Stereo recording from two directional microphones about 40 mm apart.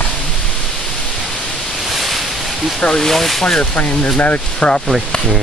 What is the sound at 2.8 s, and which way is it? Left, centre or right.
Speech, centre.